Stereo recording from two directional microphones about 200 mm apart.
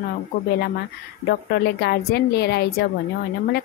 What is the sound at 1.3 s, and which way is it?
A woman's voice, 55° left (ahead or behind).